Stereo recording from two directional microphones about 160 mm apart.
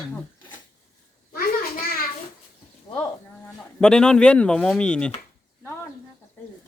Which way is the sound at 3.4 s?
5° left (ahead or behind).